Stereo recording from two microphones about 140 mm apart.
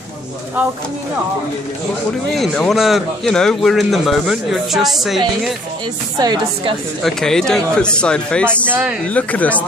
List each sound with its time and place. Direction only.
2.3 s a man's voice: centre (ahead or behind)
6.1 s a woman's voice: 30° right (ahead or behind)
7.0 s a man's voice: centre (ahead or behind)
8.6 s speech: 10° right (ahead or behind)
9.0 s speech: 10° left (ahead or behind)